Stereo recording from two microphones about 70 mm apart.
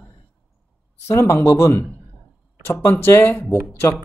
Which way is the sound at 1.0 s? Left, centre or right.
Left.